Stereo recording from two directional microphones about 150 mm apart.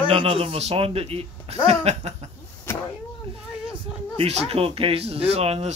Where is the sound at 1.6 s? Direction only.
45° right (ahead or behind).